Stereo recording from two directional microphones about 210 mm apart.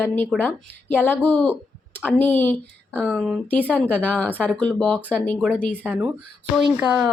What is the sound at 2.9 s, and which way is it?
A woman's voice, 5° right (ahead or behind).